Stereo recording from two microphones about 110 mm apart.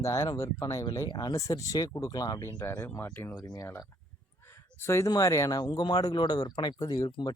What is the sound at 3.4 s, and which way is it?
Speech, 30° left (ahead or behind).